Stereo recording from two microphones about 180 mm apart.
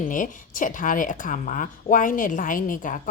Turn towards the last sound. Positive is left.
turn(degrees=45)  # may be behind; listen again after turning